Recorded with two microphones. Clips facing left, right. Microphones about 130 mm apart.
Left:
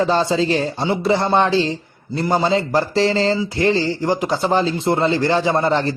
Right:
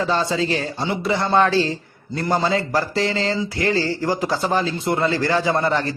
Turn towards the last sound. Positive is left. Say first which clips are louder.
# left 3 dB
turn(degrees=25)  # may be behind; listen again after turning